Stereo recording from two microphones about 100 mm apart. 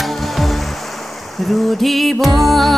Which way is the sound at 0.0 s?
Centre (ahead or behind).